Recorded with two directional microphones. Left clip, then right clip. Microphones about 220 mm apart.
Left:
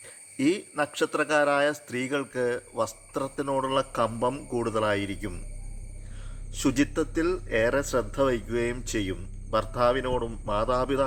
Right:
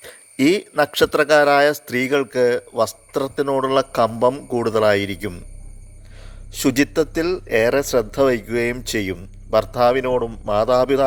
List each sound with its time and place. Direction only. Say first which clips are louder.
0.0 s speech: right 8 dB; 45° right (ahead or behind)
6.5 s speech: right 7 dB; 35° right (ahead or behind)